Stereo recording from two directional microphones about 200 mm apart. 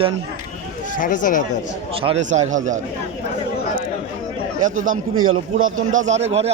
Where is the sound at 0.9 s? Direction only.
40° left (ahead or behind).